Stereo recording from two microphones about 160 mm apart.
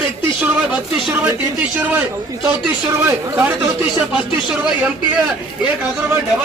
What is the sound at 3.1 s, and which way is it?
Speech, 15° right (ahead or behind).